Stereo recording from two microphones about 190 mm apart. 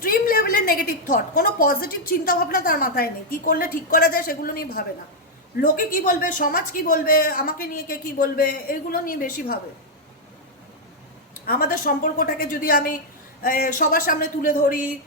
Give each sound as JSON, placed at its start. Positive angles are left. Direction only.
{"t": 0.0, "sound": "a woman's voice", "side_deg": 50}
{"t": 11.4, "sound": "a woman's voice", "side_deg": 50}